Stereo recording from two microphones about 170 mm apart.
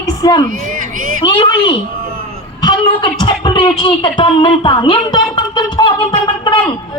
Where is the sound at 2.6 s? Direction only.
25° left (ahead or behind).